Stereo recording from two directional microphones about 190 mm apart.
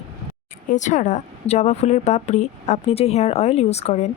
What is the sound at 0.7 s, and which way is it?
A woman's voice, 40° left (ahead or behind).